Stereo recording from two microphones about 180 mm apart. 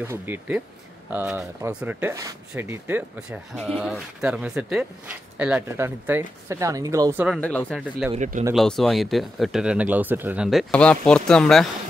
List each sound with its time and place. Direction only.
0.0 s speech: 10° right (ahead or behind)
7.3 s speech: 5° left (ahead or behind)
8.1 s speech: 40° right (ahead or behind)
8.5 s speech: centre (ahead or behind)